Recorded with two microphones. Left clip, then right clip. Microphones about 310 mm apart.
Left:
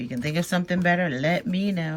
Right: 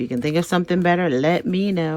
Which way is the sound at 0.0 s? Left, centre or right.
Centre.